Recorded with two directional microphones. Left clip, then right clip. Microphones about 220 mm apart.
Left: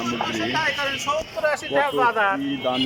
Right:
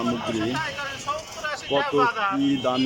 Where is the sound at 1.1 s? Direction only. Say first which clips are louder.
Left 4 dB; 20° left (ahead or behind).